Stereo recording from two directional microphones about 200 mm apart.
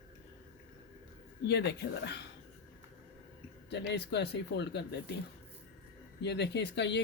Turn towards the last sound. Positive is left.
turn(degrees=60)  # may be behind; listen again after turning